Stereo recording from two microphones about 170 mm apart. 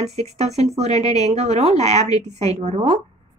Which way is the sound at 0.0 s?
40° right (ahead or behind).